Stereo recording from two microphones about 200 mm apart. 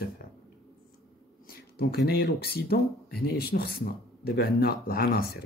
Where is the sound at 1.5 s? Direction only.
50° left (ahead or behind).